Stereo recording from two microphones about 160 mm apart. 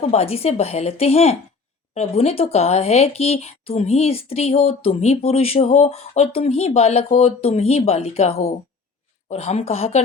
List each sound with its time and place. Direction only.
0.0 s speech: 40° left (ahead or behind)